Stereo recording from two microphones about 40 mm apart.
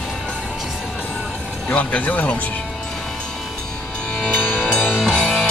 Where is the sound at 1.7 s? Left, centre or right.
Left.